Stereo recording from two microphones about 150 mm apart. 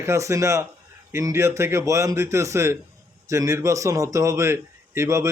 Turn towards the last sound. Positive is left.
turn(degrees=-20)  # may be behind; listen again after turning